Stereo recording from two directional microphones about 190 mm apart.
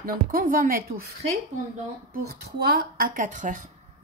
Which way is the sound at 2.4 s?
55° right (ahead or behind).